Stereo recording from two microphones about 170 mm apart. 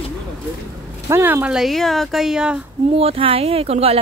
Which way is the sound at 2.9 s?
35° right (ahead or behind).